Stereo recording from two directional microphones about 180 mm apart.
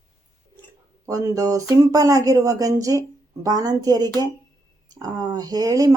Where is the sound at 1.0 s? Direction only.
15° right (ahead or behind).